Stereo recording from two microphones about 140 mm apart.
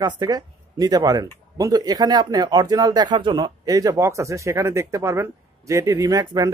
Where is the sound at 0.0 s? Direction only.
30° right (ahead or behind).